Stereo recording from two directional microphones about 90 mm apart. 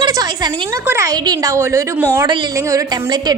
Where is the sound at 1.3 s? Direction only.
45° right (ahead or behind).